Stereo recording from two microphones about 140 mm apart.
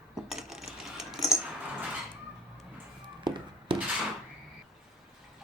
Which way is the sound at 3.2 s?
35° right (ahead or behind).